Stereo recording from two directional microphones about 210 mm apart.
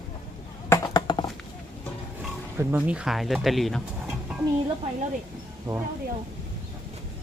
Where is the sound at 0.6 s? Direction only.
15° left (ahead or behind).